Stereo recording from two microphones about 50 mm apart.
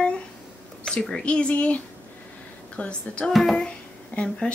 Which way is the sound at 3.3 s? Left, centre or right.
Centre.